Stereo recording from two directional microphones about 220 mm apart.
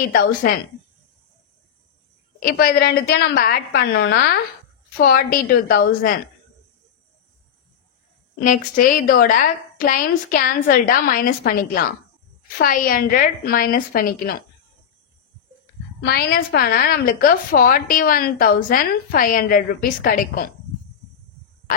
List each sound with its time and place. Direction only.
0.1 s a woman's voice: 40° left (ahead or behind)
2.4 s a woman's voice: 45° left (ahead or behind)
8.5 s a woman's voice: 35° left (ahead or behind)
16.0 s a woman's voice: 45° left (ahead or behind)